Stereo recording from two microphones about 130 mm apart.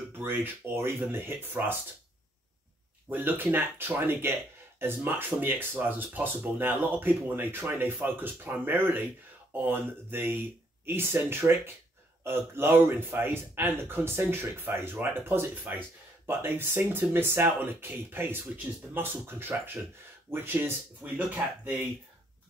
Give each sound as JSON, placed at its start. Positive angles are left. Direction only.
{"t": 0.2, "sound": "speech", "side_deg": -15}
{"t": 3.1, "sound": "speech", "side_deg": -15}